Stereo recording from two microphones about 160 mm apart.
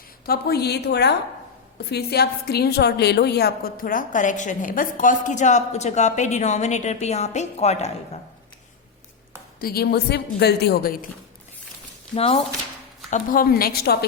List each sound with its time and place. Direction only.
0.3 s a woman's voice: 80° left; by 8.2 s 45° left (ahead or behind)
9.6 s a woman's voice: 70° left (ahead or behind)
12.1 s speech: 40° left (ahead or behind)
13.1 s a woman's voice: 55° left (ahead or behind); by 14.0 s 75° left (ahead or behind)